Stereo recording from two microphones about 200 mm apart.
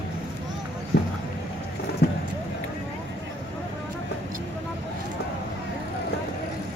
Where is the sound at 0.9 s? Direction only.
55° left (ahead or behind).